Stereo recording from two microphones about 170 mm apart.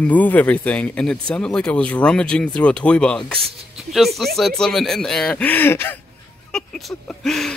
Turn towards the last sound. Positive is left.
turn(degrees=5)  # may be behind; listen again after turning